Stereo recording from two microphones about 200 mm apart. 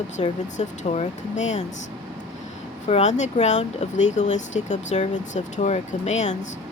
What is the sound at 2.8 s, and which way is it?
A woman's voice, 35° left (ahead or behind).